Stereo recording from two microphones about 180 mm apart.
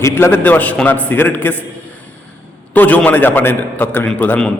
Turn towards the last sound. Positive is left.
turn(degrees=10)  # may be behind; listen again after turning